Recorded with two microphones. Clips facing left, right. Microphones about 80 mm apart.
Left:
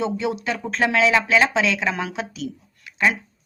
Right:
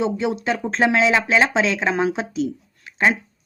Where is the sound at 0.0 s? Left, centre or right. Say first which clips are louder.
Right 2 dB; right.